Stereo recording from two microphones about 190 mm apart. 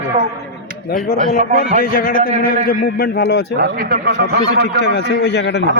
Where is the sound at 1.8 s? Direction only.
50° left (ahead or behind).